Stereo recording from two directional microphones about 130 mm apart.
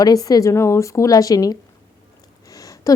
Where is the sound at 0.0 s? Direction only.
30° left (ahead or behind).